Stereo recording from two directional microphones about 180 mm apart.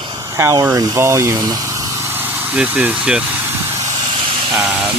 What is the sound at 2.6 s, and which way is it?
Speech, 5° right (ahead or behind).